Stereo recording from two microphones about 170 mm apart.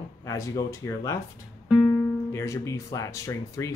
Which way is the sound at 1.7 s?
Centre (ahead or behind).